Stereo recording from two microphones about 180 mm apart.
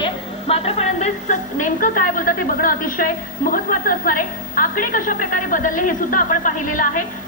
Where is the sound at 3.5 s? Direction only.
50° left (ahead or behind).